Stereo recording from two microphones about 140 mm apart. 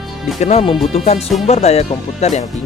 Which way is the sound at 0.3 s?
55° left (ahead or behind).